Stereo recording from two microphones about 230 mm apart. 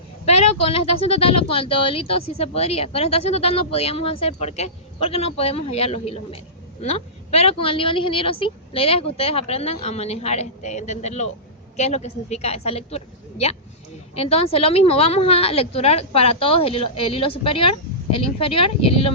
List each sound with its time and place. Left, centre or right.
0.3 s speech: left
14.2 s speech: left